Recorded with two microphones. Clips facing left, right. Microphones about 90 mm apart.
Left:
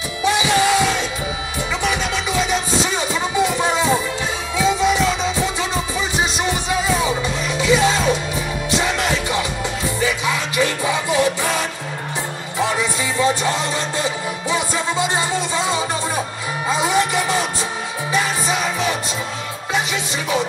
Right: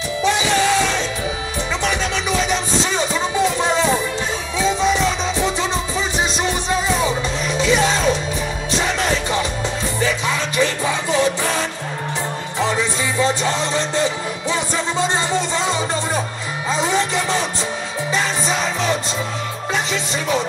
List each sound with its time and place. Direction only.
0.2 s music: 15° left (ahead or behind)
2.5 s music: 15° left (ahead or behind)
7.4 s music: 15° left (ahead or behind)
13.2 s music: 15° left (ahead or behind)
14.5 s music: 15° left (ahead or behind)